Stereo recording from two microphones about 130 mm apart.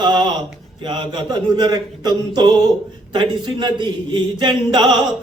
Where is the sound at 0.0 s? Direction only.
35° right (ahead or behind).